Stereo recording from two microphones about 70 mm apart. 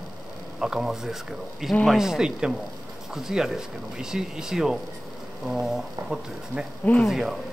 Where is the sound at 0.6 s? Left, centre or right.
Centre.